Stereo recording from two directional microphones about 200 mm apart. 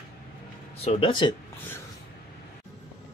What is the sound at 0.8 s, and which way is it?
Speech, 25° left (ahead or behind).